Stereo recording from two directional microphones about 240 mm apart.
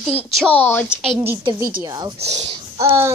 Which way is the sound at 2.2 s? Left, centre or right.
Right.